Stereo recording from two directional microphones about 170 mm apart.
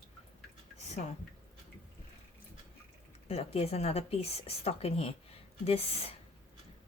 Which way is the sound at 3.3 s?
35° left (ahead or behind).